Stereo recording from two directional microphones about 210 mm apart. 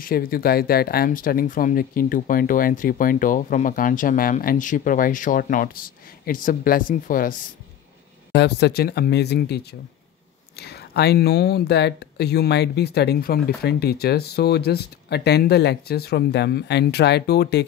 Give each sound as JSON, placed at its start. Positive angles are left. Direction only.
{"t": 0.0, "sound": "speech", "side_deg": 45}
{"t": 8.3, "sound": "speech", "side_deg": 55}